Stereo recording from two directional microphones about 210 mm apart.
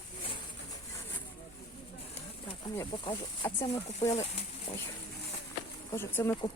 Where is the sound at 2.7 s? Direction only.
20° left (ahead or behind).